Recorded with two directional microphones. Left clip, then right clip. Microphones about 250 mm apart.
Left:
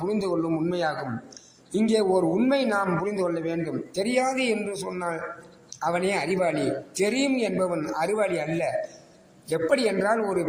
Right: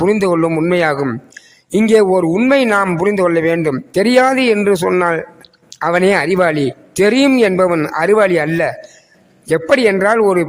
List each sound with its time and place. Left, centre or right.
0.0 s a man's voice: right